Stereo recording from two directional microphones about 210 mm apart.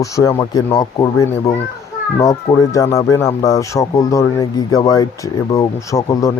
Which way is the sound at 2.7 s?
15° left (ahead or behind).